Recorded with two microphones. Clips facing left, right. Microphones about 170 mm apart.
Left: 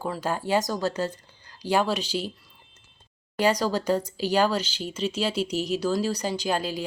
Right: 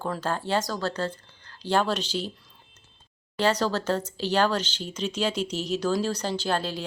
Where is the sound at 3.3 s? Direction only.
10° left (ahead or behind).